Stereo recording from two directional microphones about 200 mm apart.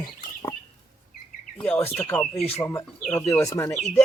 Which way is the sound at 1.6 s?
10° left (ahead or behind).